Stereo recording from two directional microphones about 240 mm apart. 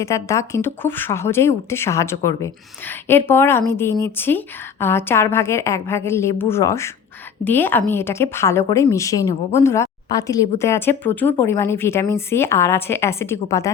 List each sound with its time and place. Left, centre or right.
0.0 s a woman's voice: centre